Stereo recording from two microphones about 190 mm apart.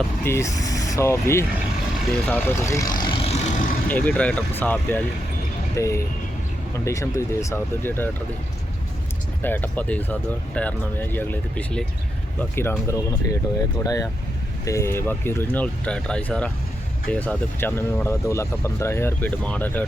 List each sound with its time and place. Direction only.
0.3 s speech: 15° left (ahead or behind)
2.2 s vehicle: 10° left (ahead or behind); by 3.7 s 35° left (ahead or behind)
3.8 s speech: 5° left (ahead or behind)
9.4 s speech: 10° left (ahead or behind)